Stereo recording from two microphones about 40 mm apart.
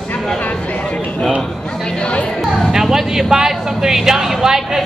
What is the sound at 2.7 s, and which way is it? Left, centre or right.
Speech, centre.